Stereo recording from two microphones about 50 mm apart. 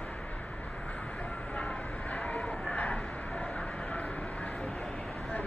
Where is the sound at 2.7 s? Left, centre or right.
Left.